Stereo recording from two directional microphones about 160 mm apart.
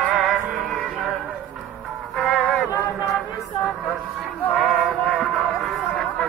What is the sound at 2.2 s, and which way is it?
Music, centre (ahead or behind).